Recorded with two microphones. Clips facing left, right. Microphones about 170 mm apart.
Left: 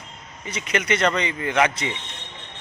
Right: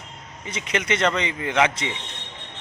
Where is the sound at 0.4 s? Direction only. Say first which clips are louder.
Left 1 dB; 25° right (ahead or behind).